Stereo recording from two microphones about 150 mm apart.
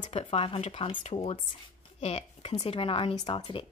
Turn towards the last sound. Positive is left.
turn(degrees=30)  # may be behind; listen again after turning